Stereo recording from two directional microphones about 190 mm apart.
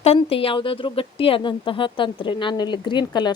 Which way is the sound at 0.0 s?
30° left (ahead or behind).